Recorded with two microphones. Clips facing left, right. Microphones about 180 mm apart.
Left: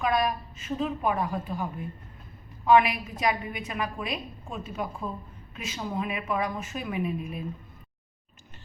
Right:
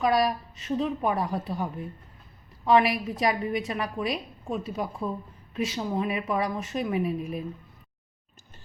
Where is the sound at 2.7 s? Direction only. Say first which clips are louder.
Even; 40° right (ahead or behind).